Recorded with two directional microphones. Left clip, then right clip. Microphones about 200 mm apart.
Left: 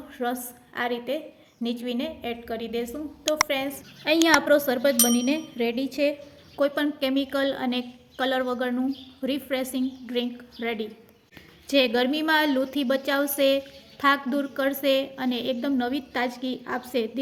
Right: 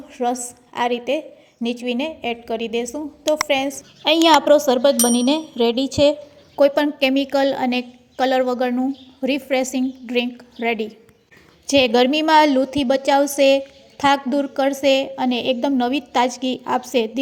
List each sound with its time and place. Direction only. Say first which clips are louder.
0.1 s a woman's voice: right 7 dB; 25° right (ahead or behind)